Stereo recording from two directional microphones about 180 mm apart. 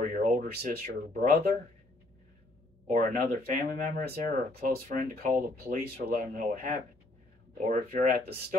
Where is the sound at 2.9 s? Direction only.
50° right (ahead or behind).